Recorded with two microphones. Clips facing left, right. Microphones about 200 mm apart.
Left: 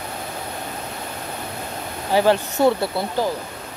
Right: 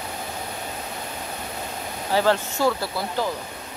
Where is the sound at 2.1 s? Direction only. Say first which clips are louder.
Left 4 dB; 15° left (ahead or behind).